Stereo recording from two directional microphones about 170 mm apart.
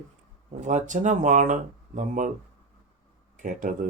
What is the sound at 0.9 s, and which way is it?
Mantra, 45° right (ahead or behind).